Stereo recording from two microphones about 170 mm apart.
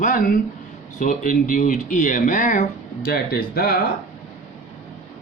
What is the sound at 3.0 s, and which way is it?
Speech, 65° left (ahead or behind).